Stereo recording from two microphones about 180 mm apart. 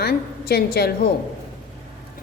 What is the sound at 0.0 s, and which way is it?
Speech, 60° left (ahead or behind).